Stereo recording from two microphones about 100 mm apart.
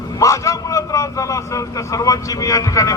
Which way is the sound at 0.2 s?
35° left (ahead or behind).